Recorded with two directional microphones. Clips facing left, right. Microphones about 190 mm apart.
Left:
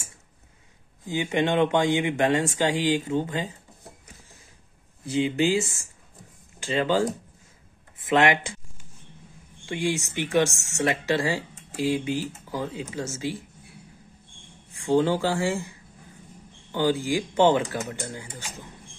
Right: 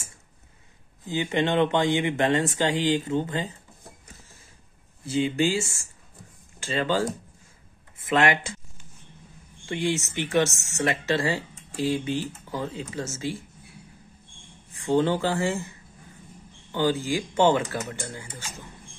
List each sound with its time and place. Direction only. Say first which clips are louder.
1.0 s speech: left 1 dB; 15° left (ahead or behind)
5.0 s speech: left 1 dB; 20° left (ahead or behind)
9.7 s speech: even; 15° left (ahead or behind)
14.7 s speech: left 1 dB; 15° left (ahead or behind)
16.7 s speech: left 1 dB; 15° left (ahead or behind)